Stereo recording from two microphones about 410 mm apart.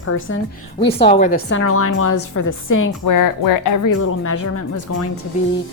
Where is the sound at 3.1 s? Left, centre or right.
Left.